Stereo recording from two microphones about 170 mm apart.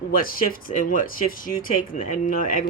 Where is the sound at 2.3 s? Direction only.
55° left (ahead or behind).